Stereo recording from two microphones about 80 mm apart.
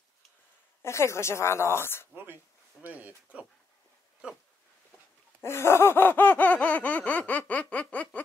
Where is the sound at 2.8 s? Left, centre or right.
Centre.